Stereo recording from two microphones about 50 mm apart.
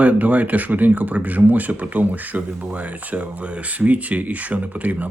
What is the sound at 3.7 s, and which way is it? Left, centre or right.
Speech, right.